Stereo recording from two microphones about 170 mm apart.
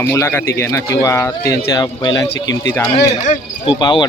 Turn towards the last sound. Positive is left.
turn(degrees=25)  # may be behind; listen again after turning